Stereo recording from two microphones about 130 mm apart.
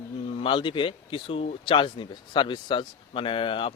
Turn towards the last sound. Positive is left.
turn(degrees=40)  # may be behind; listen again after turning